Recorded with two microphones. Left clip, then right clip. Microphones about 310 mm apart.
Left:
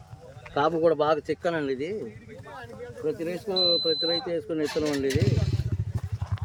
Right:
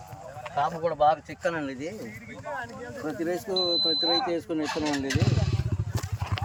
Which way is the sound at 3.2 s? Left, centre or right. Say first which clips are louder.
Left 1 dB; centre.